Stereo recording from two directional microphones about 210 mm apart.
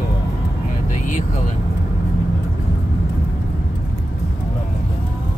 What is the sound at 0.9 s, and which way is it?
Vehicle, 40° left (ahead or behind).